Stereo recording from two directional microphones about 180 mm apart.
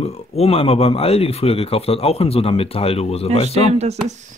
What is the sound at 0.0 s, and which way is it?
Speech, 35° left (ahead or behind).